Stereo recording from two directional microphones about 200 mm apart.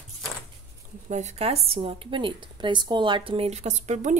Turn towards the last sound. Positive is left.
turn(degrees=-35)  # may be behind; listen again after turning